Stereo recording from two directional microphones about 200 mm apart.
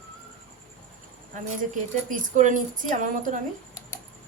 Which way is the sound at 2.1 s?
40° right (ahead or behind).